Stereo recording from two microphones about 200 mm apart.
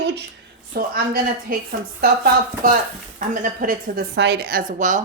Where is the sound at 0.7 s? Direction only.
45° right (ahead or behind).